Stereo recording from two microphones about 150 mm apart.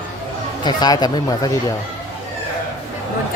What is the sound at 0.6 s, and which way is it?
Speech, 25° left (ahead or behind).